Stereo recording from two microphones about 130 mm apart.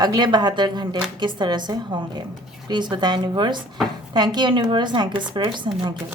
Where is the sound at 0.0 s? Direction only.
35° right (ahead or behind).